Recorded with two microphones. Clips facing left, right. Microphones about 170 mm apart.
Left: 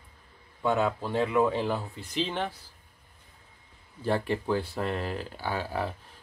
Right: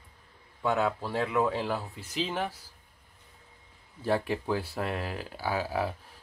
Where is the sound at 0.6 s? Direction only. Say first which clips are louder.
Left 1 dB; centre (ahead or behind).